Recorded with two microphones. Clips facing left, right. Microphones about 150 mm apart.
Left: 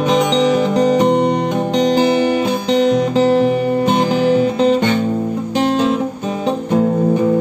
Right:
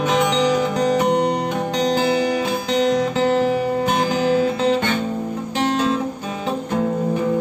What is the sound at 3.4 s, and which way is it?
Music, 20° left (ahead or behind).